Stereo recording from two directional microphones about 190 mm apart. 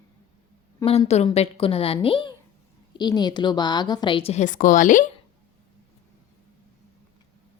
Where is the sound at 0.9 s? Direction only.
35° left (ahead or behind).